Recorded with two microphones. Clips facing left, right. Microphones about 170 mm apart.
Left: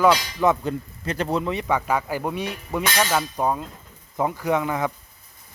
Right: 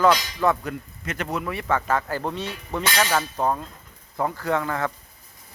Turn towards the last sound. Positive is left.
turn(degrees=15)  # may be behind; listen again after turning